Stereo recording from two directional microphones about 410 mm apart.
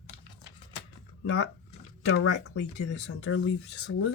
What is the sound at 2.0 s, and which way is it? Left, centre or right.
Speech, left.